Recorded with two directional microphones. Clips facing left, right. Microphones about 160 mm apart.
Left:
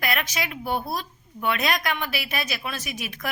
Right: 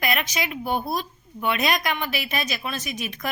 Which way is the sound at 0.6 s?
15° right (ahead or behind).